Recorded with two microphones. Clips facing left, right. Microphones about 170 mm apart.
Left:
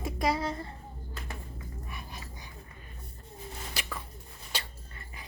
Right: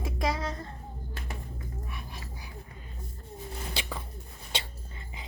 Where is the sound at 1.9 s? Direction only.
Centre (ahead or behind).